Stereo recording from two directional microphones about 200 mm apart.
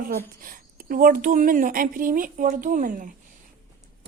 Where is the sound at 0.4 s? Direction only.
45° right (ahead or behind).